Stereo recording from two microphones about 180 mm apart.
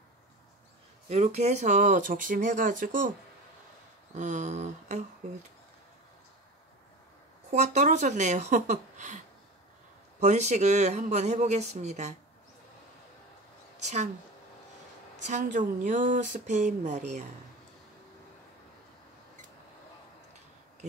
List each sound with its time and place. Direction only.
1.0 s speech: 40° right (ahead or behind)
4.1 s speech: 40° right (ahead or behind)
7.5 s speech: 40° right (ahead or behind)
10.2 s speech: 40° right (ahead or behind)
13.7 s a woman's voice: 40° right (ahead or behind)
15.2 s speech: 45° right (ahead or behind)